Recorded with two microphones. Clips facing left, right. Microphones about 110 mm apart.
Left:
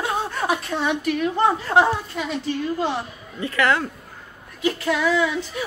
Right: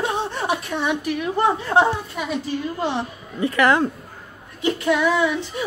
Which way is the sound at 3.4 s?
20° right (ahead or behind).